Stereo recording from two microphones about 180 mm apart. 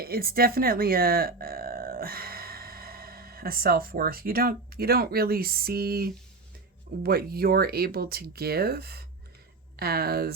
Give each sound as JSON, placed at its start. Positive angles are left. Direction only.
{"t": 0.0, "sound": "speech", "side_deg": -55}